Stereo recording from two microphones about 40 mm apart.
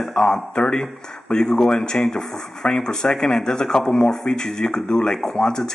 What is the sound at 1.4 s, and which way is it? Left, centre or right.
Speech, centre.